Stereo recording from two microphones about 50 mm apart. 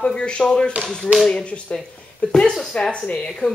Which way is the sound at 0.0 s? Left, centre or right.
Centre.